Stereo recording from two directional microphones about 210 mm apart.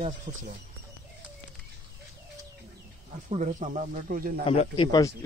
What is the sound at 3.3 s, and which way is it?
Speech, 35° right (ahead or behind).